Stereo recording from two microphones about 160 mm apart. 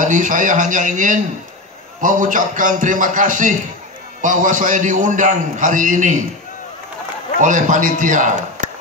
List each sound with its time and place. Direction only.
0.0 s a man's voice: 55° right (ahead or behind)
7.3 s a man's voice: 55° right (ahead or behind)